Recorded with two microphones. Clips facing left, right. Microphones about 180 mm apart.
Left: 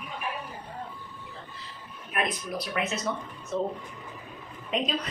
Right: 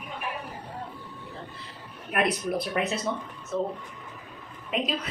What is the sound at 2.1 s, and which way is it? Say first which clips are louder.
Speech: right 5 dB; 65° right (ahead or behind).